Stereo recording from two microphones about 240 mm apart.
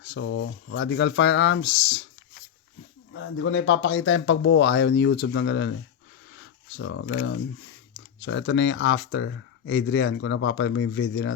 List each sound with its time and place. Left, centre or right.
0.0 s speech: left
3.1 s speech: left
6.3 s a sound: left
7.1 s speech: left
8.2 s speech: left